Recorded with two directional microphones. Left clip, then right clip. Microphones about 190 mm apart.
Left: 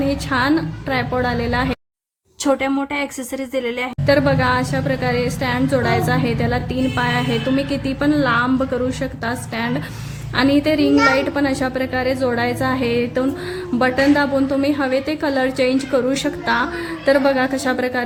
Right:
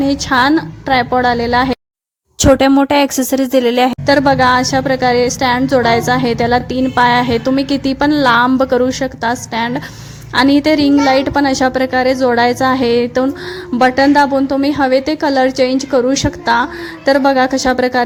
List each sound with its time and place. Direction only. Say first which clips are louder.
0.0 s a woman's voice: right 7 dB; 40° right (ahead or behind)